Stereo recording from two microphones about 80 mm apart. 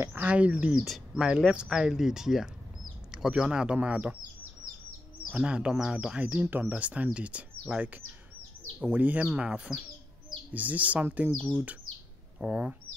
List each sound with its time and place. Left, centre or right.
0.0 s speech: right
5.3 s speech: centre